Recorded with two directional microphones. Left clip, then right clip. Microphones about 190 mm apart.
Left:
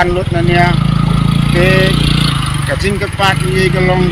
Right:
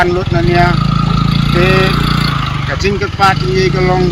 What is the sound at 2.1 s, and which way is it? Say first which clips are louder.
Vehicle: even; 30° right (ahead or behind).